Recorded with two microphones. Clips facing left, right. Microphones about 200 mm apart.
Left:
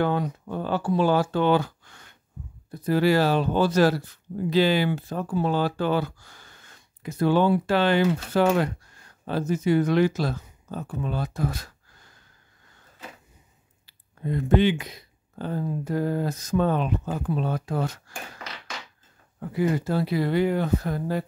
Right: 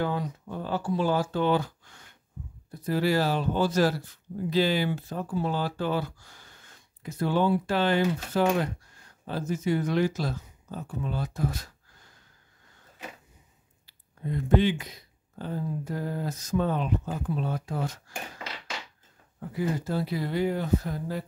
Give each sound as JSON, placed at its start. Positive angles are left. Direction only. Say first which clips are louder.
{"t": 0.0, "sound": "speech", "louder": "left 5 dB", "side_deg": 65}
{"t": 14.2, "sound": "speech", "louder": "left 3 dB", "side_deg": 75}
{"t": 19.5, "sound": "speech", "louder": "left 5 dB", "side_deg": 75}